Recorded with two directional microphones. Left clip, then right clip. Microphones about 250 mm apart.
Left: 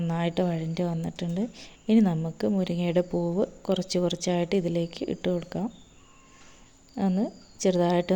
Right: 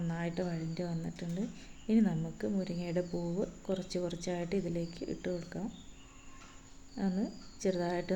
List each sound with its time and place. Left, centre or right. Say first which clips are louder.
0.1 s a woman's voice: left 11 dB; left
6.9 s speech: left 9 dB; left